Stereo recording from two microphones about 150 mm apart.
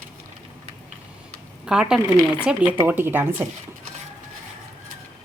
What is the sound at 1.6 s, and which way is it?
A woman's voice, 5° right (ahead or behind).